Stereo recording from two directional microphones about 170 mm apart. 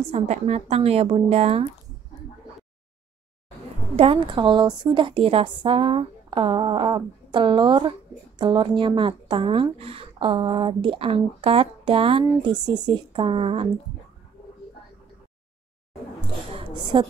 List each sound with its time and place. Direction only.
0.1 s speech: 40° right (ahead or behind)
3.9 s a woman's voice: 35° right (ahead or behind)
16.5 s a sound: 30° right (ahead or behind)